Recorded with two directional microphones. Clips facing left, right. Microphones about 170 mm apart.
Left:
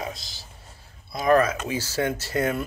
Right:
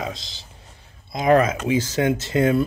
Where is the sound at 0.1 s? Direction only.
20° right (ahead or behind).